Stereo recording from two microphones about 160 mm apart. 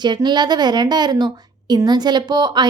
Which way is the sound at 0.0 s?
25° right (ahead or behind).